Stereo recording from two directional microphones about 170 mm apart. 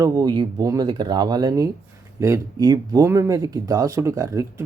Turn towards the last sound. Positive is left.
turn(degrees=-20)  # may be behind; listen again after turning